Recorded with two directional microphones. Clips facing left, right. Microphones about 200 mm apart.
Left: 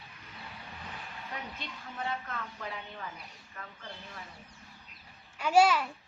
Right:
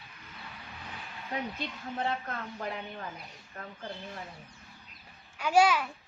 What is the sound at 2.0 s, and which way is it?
Speech, 40° right (ahead or behind).